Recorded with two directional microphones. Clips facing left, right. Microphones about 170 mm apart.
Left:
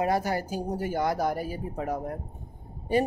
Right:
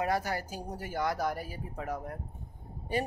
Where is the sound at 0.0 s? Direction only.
25° left (ahead or behind).